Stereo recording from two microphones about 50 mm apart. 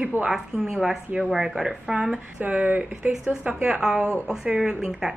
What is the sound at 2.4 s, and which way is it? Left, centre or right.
Speech, right.